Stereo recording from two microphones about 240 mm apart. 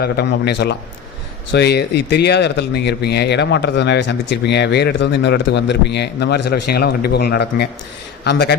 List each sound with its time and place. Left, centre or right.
0.0 s speech: left